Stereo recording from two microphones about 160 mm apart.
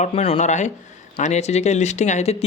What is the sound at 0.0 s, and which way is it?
Speech, 40° left (ahead or behind).